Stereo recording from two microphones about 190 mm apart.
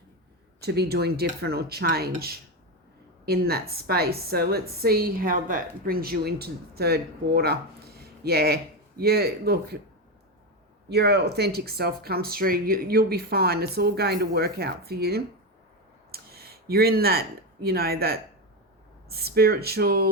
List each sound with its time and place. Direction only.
0.6 s a woman's voice: 55° right (ahead or behind)
10.8 s a woman's voice: 60° right (ahead or behind)